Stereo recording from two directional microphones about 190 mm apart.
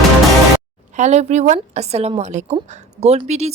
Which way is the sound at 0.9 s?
35° right (ahead or behind).